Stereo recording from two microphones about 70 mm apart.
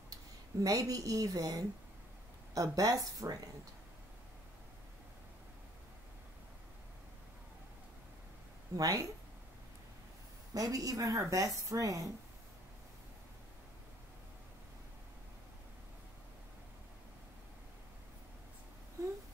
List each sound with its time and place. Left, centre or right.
0.7 s speech: right
8.7 s speech: right
10.5 s speech: right
19.0 s a sound: right